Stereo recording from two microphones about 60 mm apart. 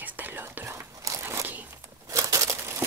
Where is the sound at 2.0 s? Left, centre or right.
Right.